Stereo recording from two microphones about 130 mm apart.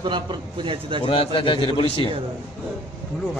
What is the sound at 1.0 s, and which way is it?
A man's voice, 45° left (ahead or behind).